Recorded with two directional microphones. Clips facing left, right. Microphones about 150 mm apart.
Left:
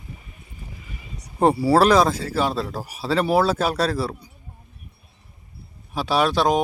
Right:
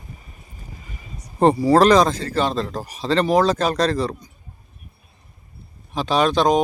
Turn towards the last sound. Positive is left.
turn(degrees=5)  # may be behind; listen again after turning